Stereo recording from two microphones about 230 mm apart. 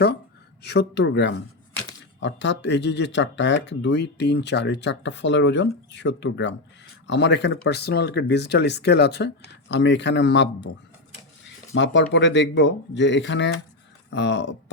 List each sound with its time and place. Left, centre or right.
0.6 s speech: left
11.7 s speech: left